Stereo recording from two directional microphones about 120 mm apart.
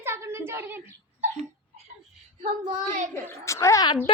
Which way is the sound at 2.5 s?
40° right (ahead or behind).